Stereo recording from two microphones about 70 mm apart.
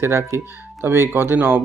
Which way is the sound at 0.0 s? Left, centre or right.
Right.